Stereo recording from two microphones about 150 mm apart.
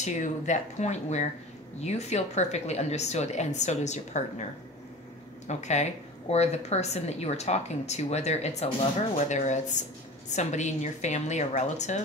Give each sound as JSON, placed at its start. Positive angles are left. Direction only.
{"t": 0.0, "sound": "a woman's voice", "side_deg": 55}
{"t": 5.5, "sound": "a woman's voice", "side_deg": 50}